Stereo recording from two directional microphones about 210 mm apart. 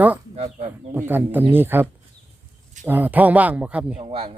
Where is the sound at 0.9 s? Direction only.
10° right (ahead or behind).